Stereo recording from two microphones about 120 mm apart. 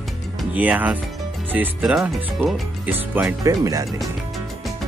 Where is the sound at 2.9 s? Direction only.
15° right (ahead or behind).